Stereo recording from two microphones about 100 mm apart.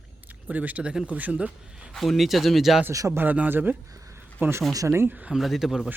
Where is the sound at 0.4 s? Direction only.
15° right (ahead or behind).